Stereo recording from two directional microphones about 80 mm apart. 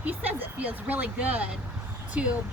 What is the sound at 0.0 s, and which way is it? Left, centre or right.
Speech, centre.